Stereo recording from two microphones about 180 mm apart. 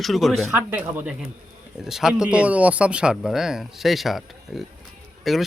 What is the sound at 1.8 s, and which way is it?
Speech, centre (ahead or behind).